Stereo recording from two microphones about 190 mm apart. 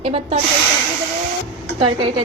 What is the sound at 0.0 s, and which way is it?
Speech, 30° right (ahead or behind).